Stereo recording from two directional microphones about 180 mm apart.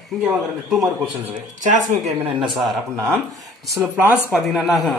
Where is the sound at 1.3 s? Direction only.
40° right (ahead or behind).